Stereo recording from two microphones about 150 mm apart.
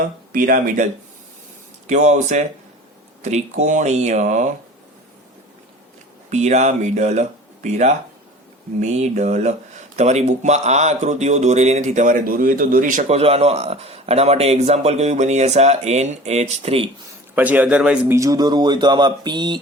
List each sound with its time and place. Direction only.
0.3 s speech: 70° right (ahead or behind)
1.9 s speech: 50° right (ahead or behind)
6.3 s speech: 50° right (ahead or behind)
13.1 s speech: 40° right (ahead or behind)
17.3 s a man's voice: 10° right (ahead or behind)
18.1 s speech: 20° right (ahead or behind)